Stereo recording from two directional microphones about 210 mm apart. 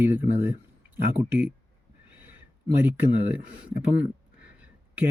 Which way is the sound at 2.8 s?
5° right (ahead or behind).